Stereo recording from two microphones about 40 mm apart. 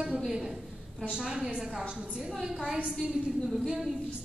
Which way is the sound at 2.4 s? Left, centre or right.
Centre.